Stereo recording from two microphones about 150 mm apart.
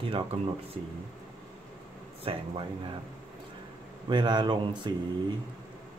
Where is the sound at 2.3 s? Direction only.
35° right (ahead or behind).